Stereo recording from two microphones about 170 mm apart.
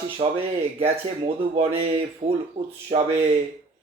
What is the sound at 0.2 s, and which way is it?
Speech, 30° right (ahead or behind).